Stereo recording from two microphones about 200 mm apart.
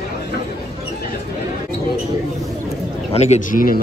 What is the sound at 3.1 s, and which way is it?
Speech, 35° left (ahead or behind).